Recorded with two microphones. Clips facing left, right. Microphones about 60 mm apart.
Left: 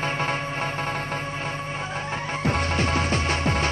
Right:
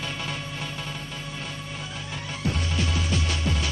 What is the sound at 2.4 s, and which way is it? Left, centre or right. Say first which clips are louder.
Music: left 4 dB; left.